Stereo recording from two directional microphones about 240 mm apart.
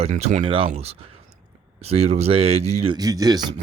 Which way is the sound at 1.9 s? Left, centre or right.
Right.